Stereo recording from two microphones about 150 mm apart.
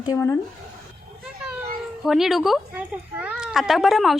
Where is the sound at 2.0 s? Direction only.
Centre (ahead or behind).